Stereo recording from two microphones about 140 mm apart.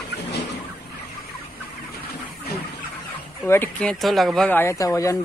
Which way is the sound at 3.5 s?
10° left (ahead or behind).